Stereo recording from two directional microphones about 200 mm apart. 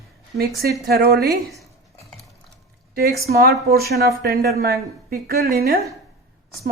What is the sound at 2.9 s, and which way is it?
A woman's voice, 50° right (ahead or behind).